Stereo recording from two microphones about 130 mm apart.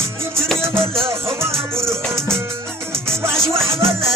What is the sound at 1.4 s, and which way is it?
Music, 20° right (ahead or behind).